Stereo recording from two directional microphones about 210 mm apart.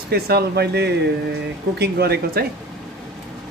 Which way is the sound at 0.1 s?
50° right (ahead or behind).